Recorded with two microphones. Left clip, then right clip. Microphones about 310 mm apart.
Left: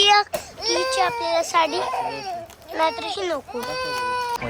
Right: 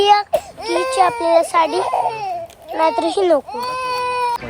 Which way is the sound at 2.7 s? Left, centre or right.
Centre.